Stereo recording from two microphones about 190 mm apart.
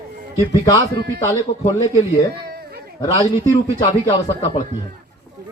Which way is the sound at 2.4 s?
55° right (ahead or behind).